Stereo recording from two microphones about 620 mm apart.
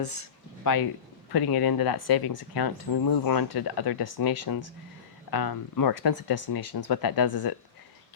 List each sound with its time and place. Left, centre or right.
0.0 s speech: left